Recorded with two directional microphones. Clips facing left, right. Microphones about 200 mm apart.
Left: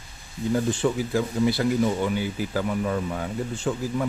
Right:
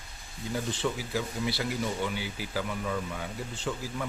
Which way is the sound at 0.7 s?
50° left (ahead or behind).